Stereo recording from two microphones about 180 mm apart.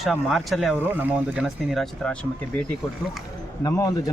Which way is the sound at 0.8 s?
10° right (ahead or behind).